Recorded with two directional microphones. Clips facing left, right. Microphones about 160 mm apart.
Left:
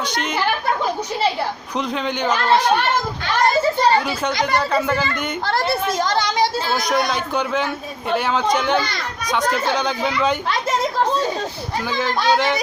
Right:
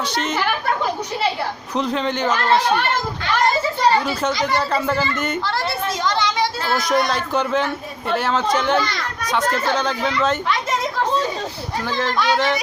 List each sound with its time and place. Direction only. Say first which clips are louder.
1.7 s speech: right 4 dB; centre (ahead or behind)
4.7 s speech: even; 5° right (ahead or behind)
5.4 s a child's voice: left 2 dB; 50° left (ahead or behind)
6.0 s children playing: right 1 dB; 40° left (ahead or behind)
6.7 s speech: right 4 dB; centre (ahead or behind)